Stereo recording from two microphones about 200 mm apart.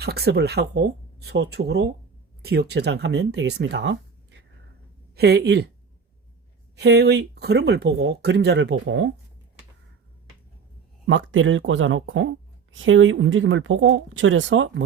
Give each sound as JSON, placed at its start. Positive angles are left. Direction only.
{"t": 0.0, "sound": "speech", "side_deg": -55}
{"t": 6.7, "sound": "speech", "side_deg": -55}
{"t": 11.0, "sound": "speech", "side_deg": -75}